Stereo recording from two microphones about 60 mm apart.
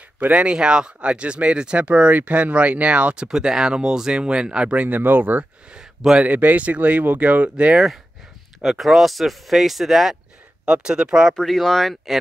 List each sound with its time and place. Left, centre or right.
0.3 s speech: centre
3.3 s speech: centre
4.8 s speech: right
5.7 s speech: centre
6.2 s speech: right
8.5 s speech: centre
10.6 s speech: centre
11.3 s speech: centre